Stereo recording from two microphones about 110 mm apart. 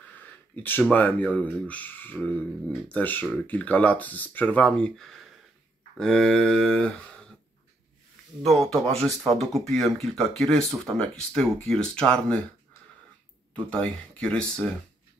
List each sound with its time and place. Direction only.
0.1 s speech: 15° left (ahead or behind)
8.4 s speech: 5° left (ahead or behind)
13.7 s speech: 10° left (ahead or behind)